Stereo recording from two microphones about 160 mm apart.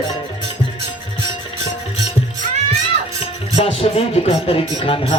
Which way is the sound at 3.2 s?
40° left (ahead or behind).